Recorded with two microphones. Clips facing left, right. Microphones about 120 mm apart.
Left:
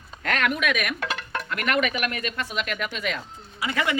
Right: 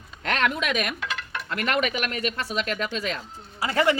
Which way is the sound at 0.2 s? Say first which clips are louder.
Even; 25° right (ahead or behind).